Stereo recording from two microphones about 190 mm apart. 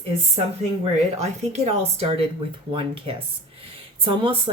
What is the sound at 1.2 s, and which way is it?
Speech, 35° right (ahead or behind).